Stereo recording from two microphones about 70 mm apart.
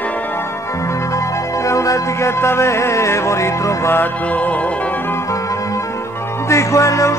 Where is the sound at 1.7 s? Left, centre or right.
Left.